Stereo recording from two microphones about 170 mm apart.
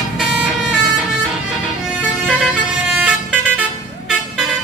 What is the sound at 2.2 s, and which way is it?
Vehicle, centre (ahead or behind).